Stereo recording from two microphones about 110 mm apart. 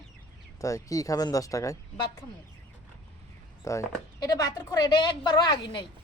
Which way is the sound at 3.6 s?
25° left (ahead or behind).